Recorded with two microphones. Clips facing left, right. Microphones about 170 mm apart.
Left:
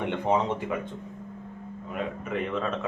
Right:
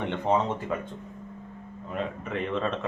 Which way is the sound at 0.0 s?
10° left (ahead or behind).